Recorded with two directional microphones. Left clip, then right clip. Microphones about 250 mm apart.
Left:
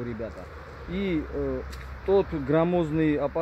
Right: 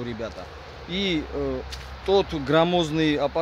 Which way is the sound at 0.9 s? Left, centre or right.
Centre.